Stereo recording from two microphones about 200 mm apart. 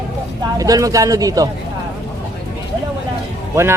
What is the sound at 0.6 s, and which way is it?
Speech, 15° right (ahead or behind).